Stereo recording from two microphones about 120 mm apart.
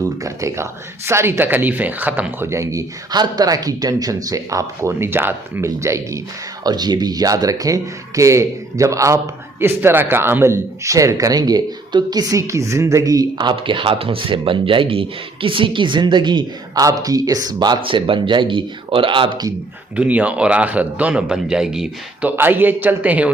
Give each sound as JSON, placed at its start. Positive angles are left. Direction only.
{"t": 0.0, "sound": "speech", "side_deg": -25}
{"t": 20.0, "sound": "a man's voice", "side_deg": -10}
{"t": 22.3, "sound": "a man's voice", "side_deg": -15}